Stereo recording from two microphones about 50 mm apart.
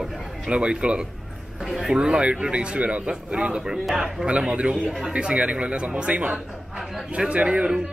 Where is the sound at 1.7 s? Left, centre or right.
Centre.